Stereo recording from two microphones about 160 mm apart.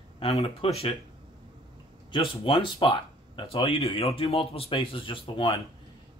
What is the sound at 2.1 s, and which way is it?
Speech, 30° left (ahead or behind).